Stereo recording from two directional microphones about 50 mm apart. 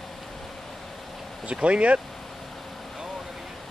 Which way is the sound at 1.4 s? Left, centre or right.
Right.